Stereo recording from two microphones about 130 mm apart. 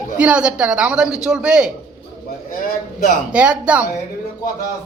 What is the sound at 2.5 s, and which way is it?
Speech, 90° left.